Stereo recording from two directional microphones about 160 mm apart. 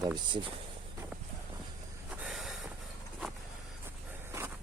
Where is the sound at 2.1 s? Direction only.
5° right (ahead or behind).